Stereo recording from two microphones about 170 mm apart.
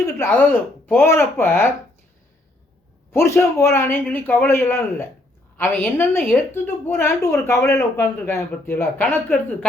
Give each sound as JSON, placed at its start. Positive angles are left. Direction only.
{"t": 0.0, "sound": "speech", "side_deg": 15}
{"t": 3.1, "sound": "speech", "side_deg": 15}